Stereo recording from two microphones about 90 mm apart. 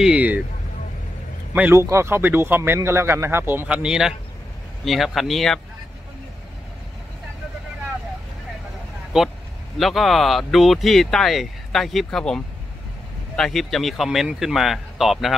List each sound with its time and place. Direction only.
0.0 s speech: 15° right (ahead or behind)
1.5 s a man's voice: 20° right (ahead or behind)
1.8 s speech: 30° right (ahead or behind); by 5.6 s centre (ahead or behind)
9.1 s speech: 10° right (ahead or behind)
13.4 s speech: 5° left (ahead or behind)